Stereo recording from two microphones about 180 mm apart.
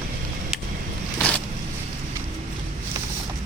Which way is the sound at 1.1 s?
10° left (ahead or behind).